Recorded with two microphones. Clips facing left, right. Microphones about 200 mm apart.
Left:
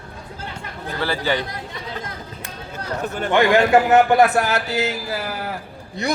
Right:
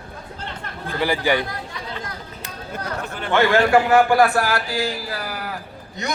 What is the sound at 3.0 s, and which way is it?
Speech, 45° left (ahead or behind).